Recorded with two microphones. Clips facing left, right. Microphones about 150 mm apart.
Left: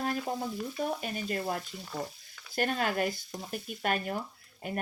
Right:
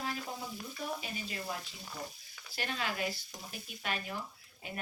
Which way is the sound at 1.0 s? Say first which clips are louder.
Left 8 dB; 50° left (ahead or behind).